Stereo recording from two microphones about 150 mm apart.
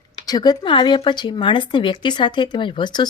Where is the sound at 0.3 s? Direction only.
25° left (ahead or behind).